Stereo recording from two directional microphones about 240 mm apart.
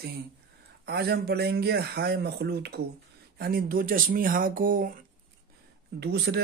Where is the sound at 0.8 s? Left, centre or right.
Right.